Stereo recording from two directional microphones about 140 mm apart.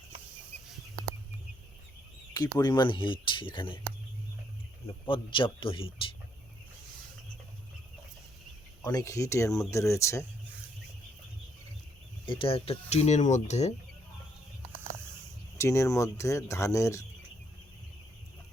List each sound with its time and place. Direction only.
2.3 s speech: 30° left (ahead or behind)
5.0 s speech: 40° left (ahead or behind)
8.8 s speech: 25° left (ahead or behind)
12.2 s speech: 40° left (ahead or behind)
15.5 s speech: 20° left (ahead or behind)